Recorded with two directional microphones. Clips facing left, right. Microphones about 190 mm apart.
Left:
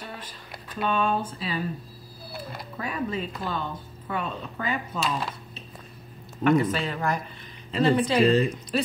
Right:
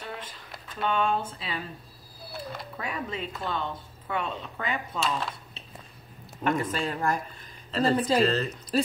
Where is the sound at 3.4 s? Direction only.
5° left (ahead or behind).